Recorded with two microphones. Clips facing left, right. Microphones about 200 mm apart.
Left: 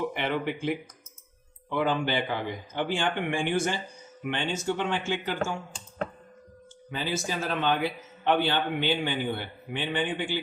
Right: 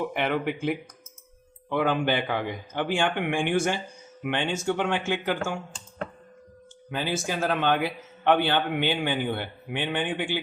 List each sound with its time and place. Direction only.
0.1 s a man's voice: 55° right (ahead or behind)
6.9 s a man's voice: 55° right (ahead or behind)